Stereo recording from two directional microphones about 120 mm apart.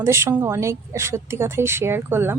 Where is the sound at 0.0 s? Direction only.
20° right (ahead or behind).